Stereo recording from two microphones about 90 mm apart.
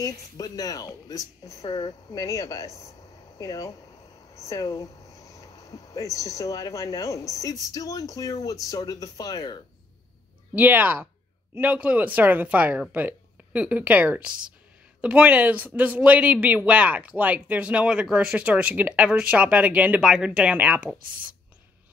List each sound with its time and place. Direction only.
0.0 s speech: 40° left (ahead or behind)
10.5 s a man's voice: 20° right (ahead or behind)